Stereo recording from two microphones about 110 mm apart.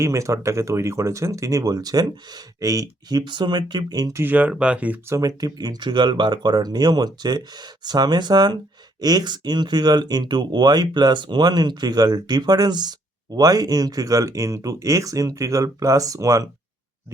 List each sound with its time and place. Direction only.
0.0 s speech: 30° right (ahead or behind)
4.2 s speech: 15° right (ahead or behind)
5.0 s speech: 30° right (ahead or behind)